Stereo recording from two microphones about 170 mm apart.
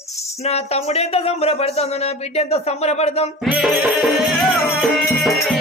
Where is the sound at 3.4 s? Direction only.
5° right (ahead or behind).